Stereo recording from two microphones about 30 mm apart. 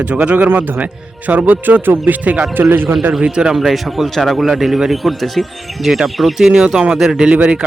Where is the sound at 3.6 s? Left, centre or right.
Centre.